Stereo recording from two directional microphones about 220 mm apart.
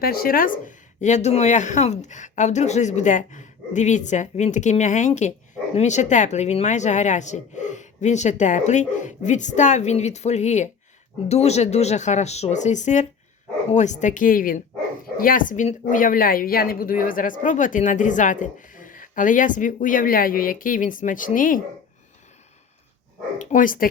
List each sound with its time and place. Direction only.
0.0 s a woman's voice: 45° left (ahead or behind)
23.4 s a woman's voice: 35° left (ahead or behind)